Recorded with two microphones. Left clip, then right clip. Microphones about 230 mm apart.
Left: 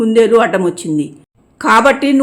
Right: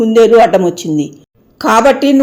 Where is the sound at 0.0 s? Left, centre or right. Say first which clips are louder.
Right 4 dB; centre.